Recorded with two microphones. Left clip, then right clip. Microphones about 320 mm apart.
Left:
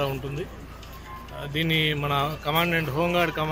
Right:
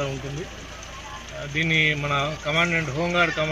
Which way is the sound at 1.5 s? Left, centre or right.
Centre.